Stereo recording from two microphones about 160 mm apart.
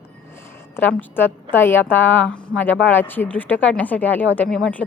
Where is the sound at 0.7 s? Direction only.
10° left (ahead or behind).